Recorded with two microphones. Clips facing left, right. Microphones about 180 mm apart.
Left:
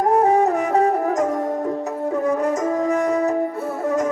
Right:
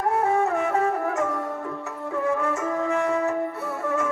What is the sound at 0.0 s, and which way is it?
Music, 40° left (ahead or behind).